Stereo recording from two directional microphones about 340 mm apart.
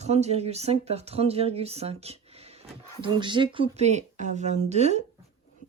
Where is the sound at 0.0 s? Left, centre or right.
Centre.